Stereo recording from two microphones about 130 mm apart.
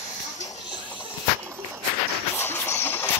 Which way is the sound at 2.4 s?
20° left (ahead or behind).